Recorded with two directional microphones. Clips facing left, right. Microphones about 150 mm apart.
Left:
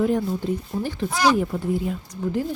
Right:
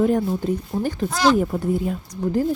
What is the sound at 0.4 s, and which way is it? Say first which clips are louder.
Speech: right 3 dB; 45° right (ahead or behind).